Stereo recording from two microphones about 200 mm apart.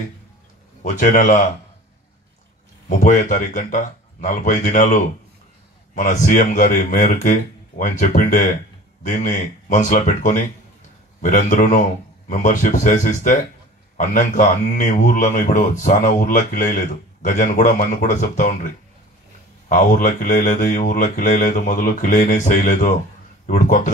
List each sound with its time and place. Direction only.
0.8 s a man's voice: 40° left (ahead or behind)
3.0 s a man's voice: 40° left (ahead or behind)
19.7 s a man's voice: 40° left (ahead or behind)